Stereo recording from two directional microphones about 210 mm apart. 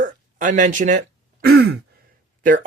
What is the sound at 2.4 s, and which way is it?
Speech, 40° right (ahead or behind).